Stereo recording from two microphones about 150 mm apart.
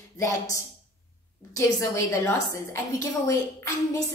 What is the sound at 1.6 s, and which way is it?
A woman's voice, 20° left (ahead or behind).